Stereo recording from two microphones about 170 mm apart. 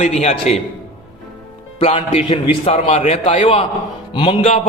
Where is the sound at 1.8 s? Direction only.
35° left (ahead or behind).